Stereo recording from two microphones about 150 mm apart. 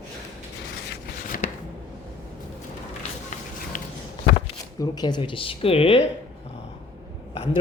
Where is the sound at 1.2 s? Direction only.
70° left (ahead or behind).